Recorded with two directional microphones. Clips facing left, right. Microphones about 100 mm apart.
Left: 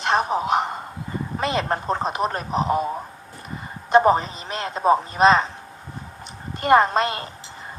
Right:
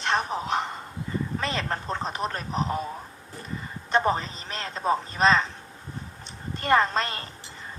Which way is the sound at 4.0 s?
25° left (ahead or behind).